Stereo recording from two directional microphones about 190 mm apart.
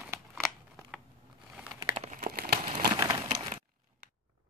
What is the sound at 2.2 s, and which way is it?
Crumpling, 50° right (ahead or behind).